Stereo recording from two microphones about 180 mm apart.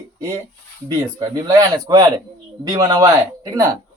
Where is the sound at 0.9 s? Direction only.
20° right (ahead or behind).